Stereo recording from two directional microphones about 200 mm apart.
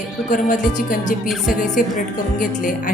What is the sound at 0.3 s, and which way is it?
Speech, 40° left (ahead or behind).